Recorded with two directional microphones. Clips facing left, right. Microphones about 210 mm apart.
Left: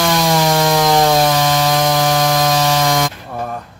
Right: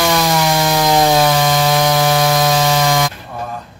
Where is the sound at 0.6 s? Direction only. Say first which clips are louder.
Right 1 dB; centre (ahead or behind).